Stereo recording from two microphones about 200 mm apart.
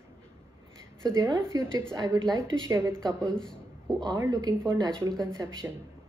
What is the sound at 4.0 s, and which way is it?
Speech, 20° right (ahead or behind).